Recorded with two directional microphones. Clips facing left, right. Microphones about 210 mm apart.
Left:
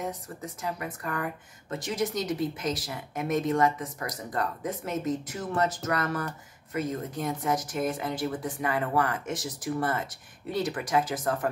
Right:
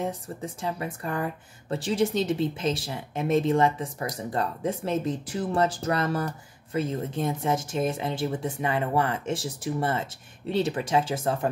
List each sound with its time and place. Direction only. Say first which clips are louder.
0.6 s speech: right 2 dB; 30° right (ahead or behind)